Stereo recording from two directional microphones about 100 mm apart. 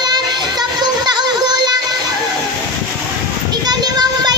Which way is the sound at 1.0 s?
45° right (ahead or behind).